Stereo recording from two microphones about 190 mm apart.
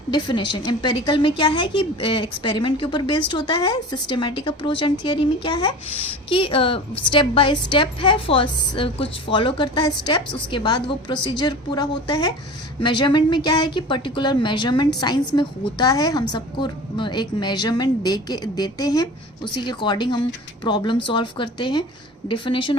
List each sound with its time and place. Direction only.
0.1 s a woman's voice: 25° left (ahead or behind)